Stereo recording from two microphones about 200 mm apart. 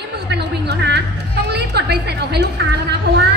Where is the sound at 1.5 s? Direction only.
55° right (ahead or behind).